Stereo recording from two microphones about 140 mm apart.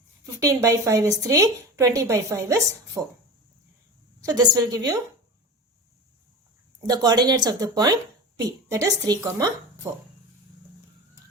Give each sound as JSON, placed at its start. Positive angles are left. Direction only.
{"t": 0.3, "sound": "a woman's voice", "side_deg": -25}
{"t": 4.2, "sound": "a woman's voice", "side_deg": -25}
{"t": 6.8, "sound": "a woman's voice", "side_deg": -25}